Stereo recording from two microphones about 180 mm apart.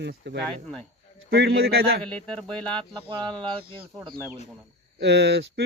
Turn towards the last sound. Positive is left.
turn(degrees=-70)  # may be behind; listen again after turning